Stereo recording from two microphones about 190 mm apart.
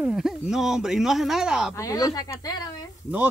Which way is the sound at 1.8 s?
15° left (ahead or behind).